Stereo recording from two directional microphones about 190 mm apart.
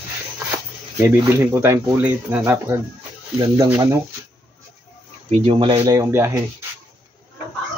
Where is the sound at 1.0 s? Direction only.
15° right (ahead or behind).